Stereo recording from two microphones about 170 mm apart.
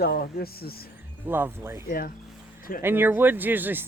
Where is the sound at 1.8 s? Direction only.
60° left (ahead or behind).